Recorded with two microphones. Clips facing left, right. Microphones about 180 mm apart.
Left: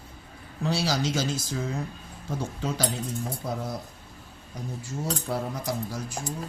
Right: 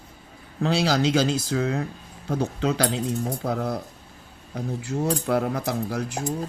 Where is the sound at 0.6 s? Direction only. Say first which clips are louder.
Right 5 dB; 60° right (ahead or behind).